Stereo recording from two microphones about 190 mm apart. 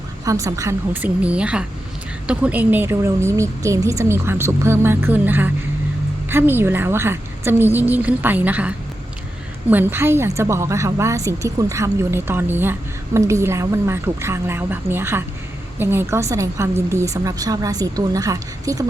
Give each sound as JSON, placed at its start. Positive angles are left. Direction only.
{"t": 0.3, "sound": "a woman's voice", "side_deg": -15}